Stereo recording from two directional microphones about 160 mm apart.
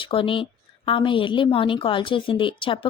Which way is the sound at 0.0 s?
35° left (ahead or behind).